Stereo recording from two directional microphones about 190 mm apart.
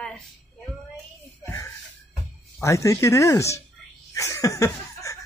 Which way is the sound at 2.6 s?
15° left (ahead or behind).